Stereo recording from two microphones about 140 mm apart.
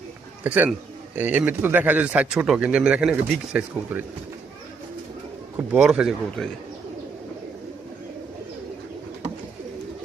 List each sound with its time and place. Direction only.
0.4 s speech: 10° right (ahead or behind)
5.7 s speech: 5° right (ahead or behind)